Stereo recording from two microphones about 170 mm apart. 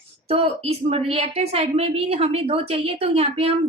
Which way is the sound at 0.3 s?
35° right (ahead or behind).